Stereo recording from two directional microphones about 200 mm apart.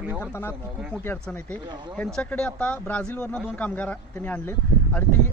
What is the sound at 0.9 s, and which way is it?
A man's voice, 10° left (ahead or behind).